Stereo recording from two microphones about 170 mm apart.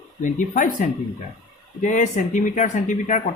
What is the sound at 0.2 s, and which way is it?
Speech, 50° left (ahead or behind).